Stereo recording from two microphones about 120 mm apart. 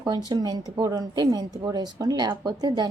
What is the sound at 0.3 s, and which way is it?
A woman's voice, 35° right (ahead or behind).